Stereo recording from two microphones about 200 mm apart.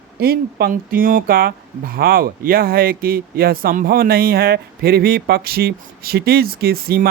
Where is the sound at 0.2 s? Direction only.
50° right (ahead or behind).